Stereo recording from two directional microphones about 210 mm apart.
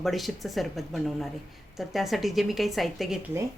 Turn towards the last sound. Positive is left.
turn(degrees=-5)  # may be behind; listen again after turning